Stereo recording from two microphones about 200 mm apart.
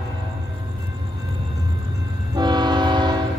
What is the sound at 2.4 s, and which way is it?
Train, 20° right (ahead or behind).